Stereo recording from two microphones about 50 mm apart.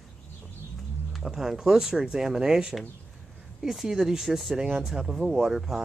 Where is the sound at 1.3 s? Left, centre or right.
Centre.